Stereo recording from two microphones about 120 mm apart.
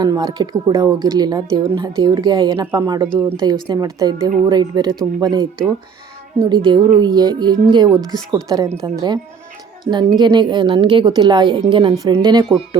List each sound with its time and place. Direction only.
0.1 s speech: 30° right (ahead or behind)
6.5 s a woman's voice: 40° right (ahead or behind)